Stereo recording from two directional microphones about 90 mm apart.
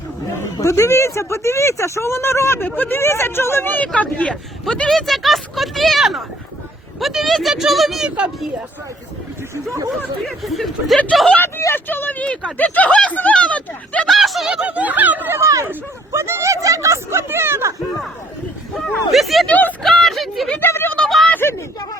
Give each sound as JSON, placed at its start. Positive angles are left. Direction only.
{"t": 0.5, "sound": "speech", "side_deg": 35}
{"t": 3.0, "sound": "speech", "side_deg": 30}
{"t": 10.2, "sound": "speech", "side_deg": 0}
{"t": 11.3, "sound": "speech", "side_deg": 25}
{"t": 14.1, "sound": "speech", "side_deg": 0}
{"t": 18.9, "sound": "speech", "side_deg": 0}
{"t": 19.5, "sound": "speech", "side_deg": 20}
{"t": 19.8, "sound": "speech", "side_deg": 5}
{"t": 20.6, "sound": "speech", "side_deg": 25}
{"t": 20.9, "sound": "a sound", "side_deg": 5}
{"t": 21.2, "sound": "a sound", "side_deg": 20}